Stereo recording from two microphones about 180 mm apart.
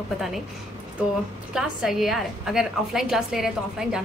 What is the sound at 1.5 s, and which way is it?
A woman's voice, centre (ahead or behind).